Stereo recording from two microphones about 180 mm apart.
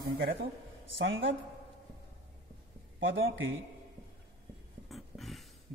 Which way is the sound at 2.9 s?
90° right.